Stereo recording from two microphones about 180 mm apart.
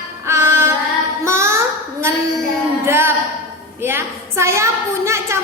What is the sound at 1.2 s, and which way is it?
Child singing, 15° right (ahead or behind).